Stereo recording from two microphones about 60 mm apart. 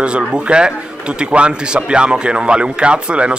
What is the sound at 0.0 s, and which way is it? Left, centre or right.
A man's voice, centre.